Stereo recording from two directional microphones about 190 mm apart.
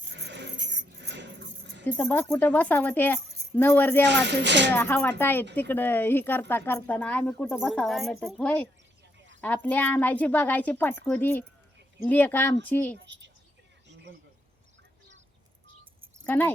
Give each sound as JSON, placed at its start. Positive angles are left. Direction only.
{"t": 0.1, "sound": "a sound", "side_deg": -65}
{"t": 1.8, "sound": "speech", "side_deg": 10}
{"t": 4.0, "sound": "speech", "side_deg": -65}
{"t": 4.7, "sound": "speech", "side_deg": 10}
{"t": 7.6, "sound": "a woman's voice", "side_deg": 0}
{"t": 13.1, "sound": "a sound", "side_deg": -70}
{"t": 16.2, "sound": "speech", "side_deg": 10}